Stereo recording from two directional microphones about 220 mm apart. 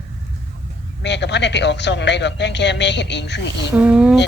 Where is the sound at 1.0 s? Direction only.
50° left (ahead or behind).